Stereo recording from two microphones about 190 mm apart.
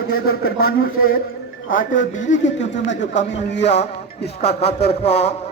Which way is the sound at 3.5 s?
65° left (ahead or behind).